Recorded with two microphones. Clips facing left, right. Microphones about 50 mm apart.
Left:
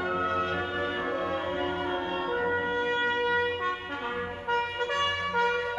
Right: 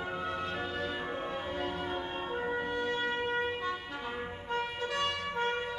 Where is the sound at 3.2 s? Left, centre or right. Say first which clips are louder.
Left 6 dB; left.